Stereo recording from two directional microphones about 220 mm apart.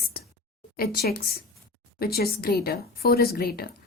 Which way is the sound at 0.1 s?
45° left (ahead or behind).